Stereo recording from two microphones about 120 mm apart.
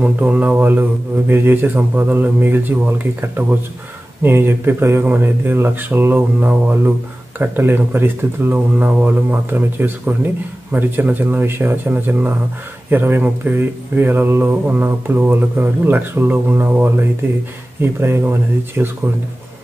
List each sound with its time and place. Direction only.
0.0 s speech: 10° right (ahead or behind)